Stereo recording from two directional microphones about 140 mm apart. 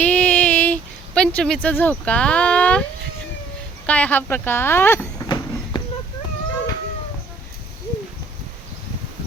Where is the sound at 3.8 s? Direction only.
10° left (ahead or behind).